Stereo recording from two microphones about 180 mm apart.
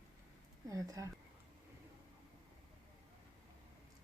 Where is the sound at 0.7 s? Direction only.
20° right (ahead or behind).